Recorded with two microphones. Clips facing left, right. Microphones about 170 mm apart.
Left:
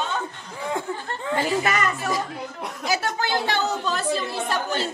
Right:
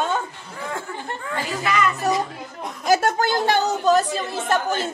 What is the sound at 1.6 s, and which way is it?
Speech, 45° left (ahead or behind).